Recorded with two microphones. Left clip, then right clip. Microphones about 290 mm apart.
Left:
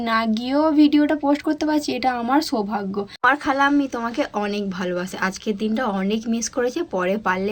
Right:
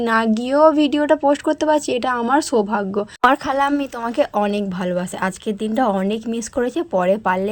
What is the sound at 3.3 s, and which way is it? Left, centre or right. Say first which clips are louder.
Speech: right 1 dB; right.